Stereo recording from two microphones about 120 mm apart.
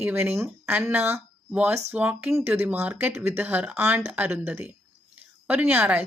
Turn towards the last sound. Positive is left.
turn(degrees=-10)  # may be behind; listen again after turning